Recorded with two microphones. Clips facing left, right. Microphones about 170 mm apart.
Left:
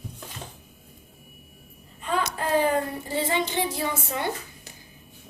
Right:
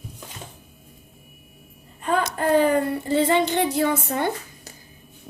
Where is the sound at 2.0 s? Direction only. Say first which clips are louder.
Right 4 dB; 55° right (ahead or behind).